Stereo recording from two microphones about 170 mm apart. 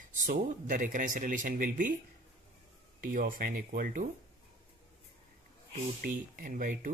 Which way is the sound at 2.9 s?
55° right (ahead or behind).